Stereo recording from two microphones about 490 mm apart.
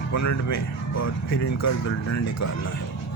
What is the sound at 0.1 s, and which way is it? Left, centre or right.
Speech, left.